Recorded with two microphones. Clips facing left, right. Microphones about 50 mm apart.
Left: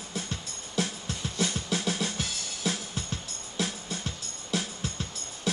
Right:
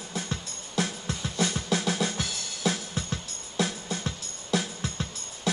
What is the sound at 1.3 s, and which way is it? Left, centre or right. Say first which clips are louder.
Music: right 3 dB; right.